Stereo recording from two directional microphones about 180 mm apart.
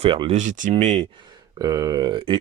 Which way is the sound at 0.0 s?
30° right (ahead or behind).